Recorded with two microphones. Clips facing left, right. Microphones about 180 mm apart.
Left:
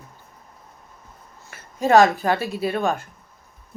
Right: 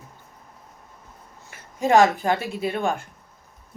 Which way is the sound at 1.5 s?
15° right (ahead or behind).